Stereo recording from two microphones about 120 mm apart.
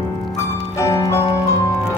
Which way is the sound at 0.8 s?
25° left (ahead or behind).